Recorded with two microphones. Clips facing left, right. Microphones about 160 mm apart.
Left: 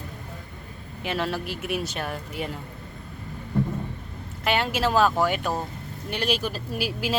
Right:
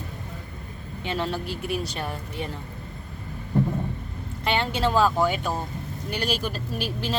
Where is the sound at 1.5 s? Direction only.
35° right (ahead or behind).